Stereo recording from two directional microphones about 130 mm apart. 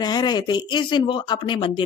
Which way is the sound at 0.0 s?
30° left (ahead or behind).